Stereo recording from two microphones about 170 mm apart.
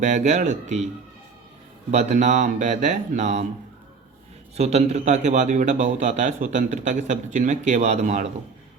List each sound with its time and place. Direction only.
0.0 s a man's voice: 45° right (ahead or behind)
1.9 s a man's voice: 45° right (ahead or behind)
4.5 s a man's voice: 40° right (ahead or behind)